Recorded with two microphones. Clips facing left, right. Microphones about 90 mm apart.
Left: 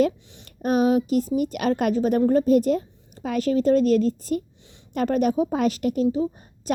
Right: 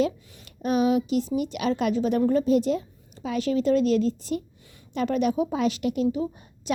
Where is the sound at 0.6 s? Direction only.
45° left (ahead or behind).